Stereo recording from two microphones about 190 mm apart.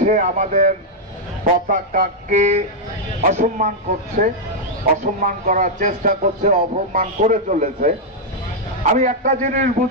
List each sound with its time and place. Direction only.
0.0 s a man's voice: 40° right (ahead or behind)
8.9 s speech: 40° right (ahead or behind)